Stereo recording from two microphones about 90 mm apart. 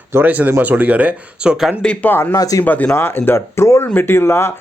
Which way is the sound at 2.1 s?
25° left (ahead or behind).